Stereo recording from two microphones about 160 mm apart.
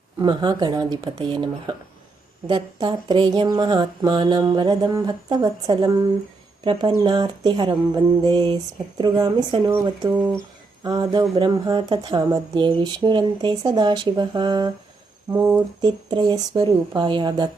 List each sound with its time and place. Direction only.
0.2 s speech: 25° right (ahead or behind)
15.3 s speech: 15° right (ahead or behind)